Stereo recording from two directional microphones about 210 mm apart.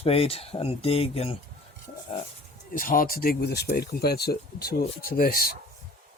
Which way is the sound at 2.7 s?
40° left (ahead or behind).